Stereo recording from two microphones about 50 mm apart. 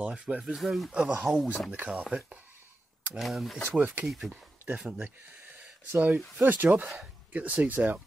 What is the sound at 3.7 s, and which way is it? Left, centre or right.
Speech, right.